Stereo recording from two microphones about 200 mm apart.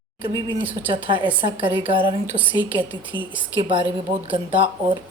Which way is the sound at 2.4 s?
10° right (ahead or behind).